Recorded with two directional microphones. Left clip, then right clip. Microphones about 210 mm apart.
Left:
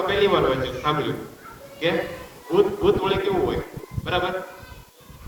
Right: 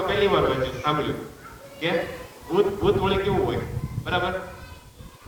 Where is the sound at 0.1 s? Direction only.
25° left (ahead or behind).